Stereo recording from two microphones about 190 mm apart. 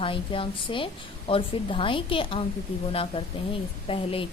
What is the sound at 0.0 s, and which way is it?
A woman's voice, 25° left (ahead or behind).